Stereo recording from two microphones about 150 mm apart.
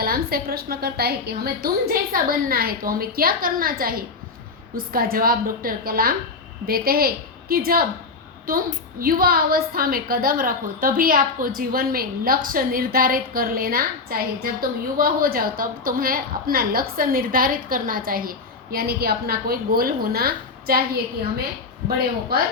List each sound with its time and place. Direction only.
0.0 s a woman's voice: 85° right
1.6 s a woman's voice: 75° right (ahead or behind)